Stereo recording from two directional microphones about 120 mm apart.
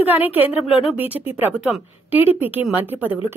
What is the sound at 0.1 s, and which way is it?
A woman's voice, 15° right (ahead or behind).